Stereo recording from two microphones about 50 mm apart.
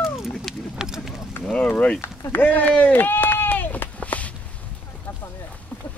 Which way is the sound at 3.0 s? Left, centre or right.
Left.